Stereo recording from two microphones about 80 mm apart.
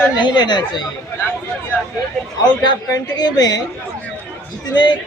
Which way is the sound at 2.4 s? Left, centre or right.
Left.